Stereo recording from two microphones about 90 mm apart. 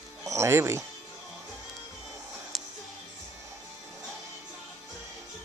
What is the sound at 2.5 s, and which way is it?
Music, centre (ahead or behind).